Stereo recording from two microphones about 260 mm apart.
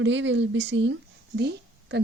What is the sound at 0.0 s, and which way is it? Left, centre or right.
Speech, right.